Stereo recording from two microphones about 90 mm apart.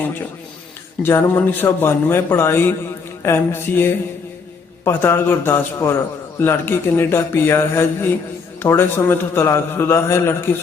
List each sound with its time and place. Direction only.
1.0 s a man's voice: 30° left (ahead or behind)